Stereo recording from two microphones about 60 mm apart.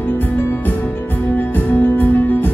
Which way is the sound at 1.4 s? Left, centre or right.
Left.